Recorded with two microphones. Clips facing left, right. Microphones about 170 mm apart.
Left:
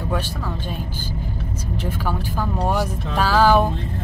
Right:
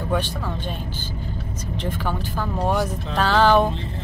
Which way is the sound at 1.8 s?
5° left (ahead or behind).